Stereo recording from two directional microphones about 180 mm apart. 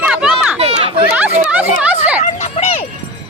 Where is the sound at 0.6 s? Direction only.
30° right (ahead or behind).